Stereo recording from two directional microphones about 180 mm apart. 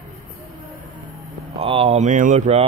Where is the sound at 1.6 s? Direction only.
35° right (ahead or behind).